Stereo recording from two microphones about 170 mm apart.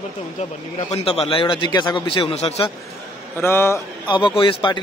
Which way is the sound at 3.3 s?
15° left (ahead or behind).